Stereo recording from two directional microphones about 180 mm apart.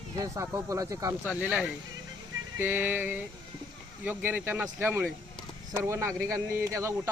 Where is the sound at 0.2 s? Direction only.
15° right (ahead or behind).